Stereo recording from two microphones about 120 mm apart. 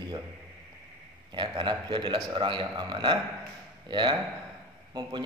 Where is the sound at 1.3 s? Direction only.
40° right (ahead or behind).